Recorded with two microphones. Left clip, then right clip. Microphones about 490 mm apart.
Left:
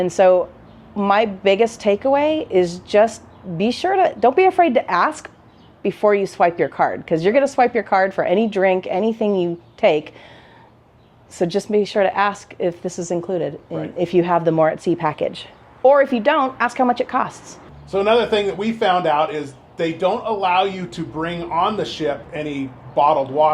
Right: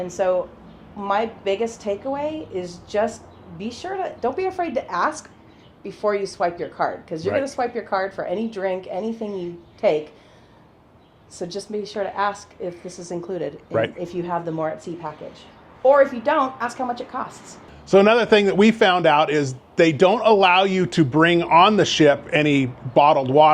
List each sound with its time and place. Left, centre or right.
0.0 s a woman's voice: left
11.3 s a woman's voice: left
17.9 s speech: right